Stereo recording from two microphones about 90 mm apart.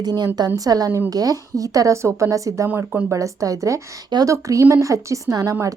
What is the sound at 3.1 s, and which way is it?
Speech, 40° right (ahead or behind).